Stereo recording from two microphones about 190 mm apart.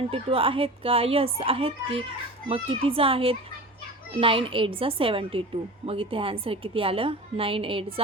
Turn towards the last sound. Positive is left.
turn(degrees=-30)  # may be behind; listen again after turning